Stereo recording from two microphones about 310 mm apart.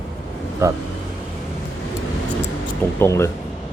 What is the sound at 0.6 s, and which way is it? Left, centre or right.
Speech, centre.